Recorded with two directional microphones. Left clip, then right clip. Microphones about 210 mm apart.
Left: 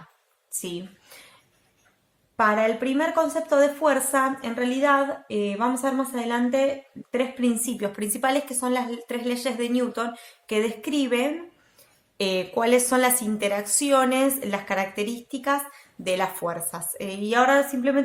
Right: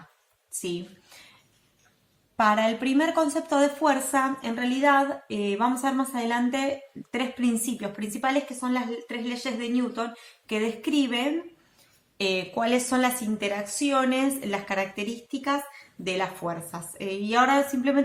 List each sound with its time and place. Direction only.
2.3 s a woman's voice: 40° left (ahead or behind)